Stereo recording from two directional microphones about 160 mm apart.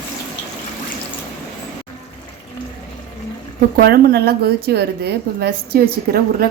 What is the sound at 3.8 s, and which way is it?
A woman's voice, 70° right (ahead or behind).